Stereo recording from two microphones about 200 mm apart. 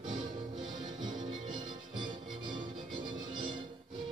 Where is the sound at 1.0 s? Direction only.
20° right (ahead or behind).